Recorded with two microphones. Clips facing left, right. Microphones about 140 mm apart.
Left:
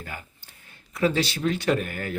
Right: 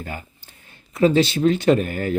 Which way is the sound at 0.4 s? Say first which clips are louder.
Right 3 dB; 25° right (ahead or behind).